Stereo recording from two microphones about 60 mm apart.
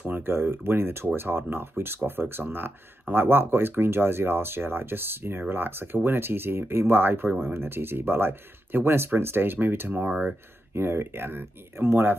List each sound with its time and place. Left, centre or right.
0.0 s speech: right